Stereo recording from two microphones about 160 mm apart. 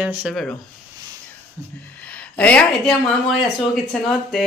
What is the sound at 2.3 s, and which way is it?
A woman's voice, 10° left (ahead or behind).